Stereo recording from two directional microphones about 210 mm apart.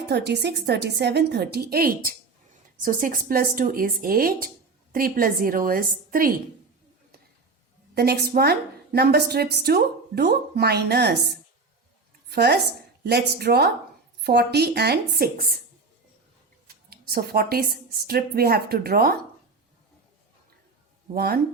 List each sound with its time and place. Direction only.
0.1 s speech: 55° right (ahead or behind)
7.9 s speech: 50° right (ahead or behind)
16.6 s speech: 45° right (ahead or behind)
21.1 s speech: 45° right (ahead or behind)